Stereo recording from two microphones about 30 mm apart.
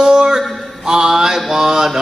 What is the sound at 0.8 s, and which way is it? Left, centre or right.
A man's voice, right.